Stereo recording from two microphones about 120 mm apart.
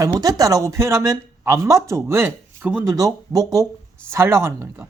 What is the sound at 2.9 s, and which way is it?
Speech, 30° right (ahead or behind).